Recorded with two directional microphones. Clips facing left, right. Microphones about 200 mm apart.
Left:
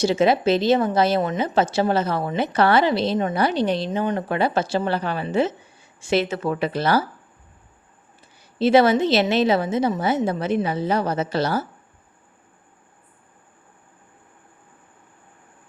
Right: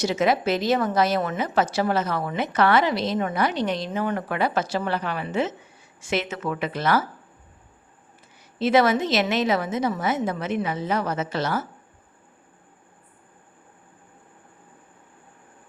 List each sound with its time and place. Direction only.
0.0 s a woman's voice: 30° left (ahead or behind)
8.5 s a woman's voice: 30° left (ahead or behind)